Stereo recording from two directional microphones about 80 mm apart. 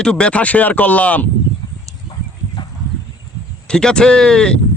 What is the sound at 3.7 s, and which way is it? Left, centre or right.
Speech, centre.